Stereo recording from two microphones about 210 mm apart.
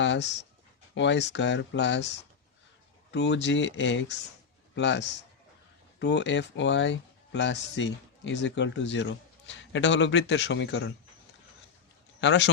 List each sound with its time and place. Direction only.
0.0 s speech: 55° left (ahead or behind)
3.1 s a man's voice: 55° left (ahead or behind)
12.2 s speech: 55° left (ahead or behind)